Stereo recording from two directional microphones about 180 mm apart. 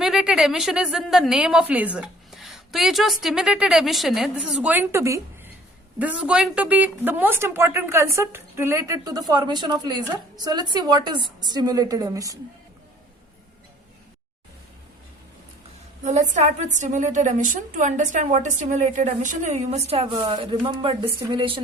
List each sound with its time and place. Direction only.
0.0 s a woman's voice: 5° right (ahead or behind); by 12.4 s 20° right (ahead or behind)
16.0 s a woman's voice: 40° right (ahead or behind)